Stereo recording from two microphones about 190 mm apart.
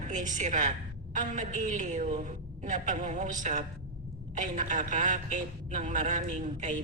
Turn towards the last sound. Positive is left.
turn(degrees=-40)  # may be behind; listen again after turning